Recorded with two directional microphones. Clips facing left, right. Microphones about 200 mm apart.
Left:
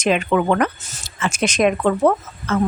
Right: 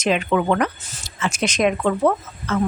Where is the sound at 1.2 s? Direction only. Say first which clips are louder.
Left 2 dB; 50° left (ahead or behind).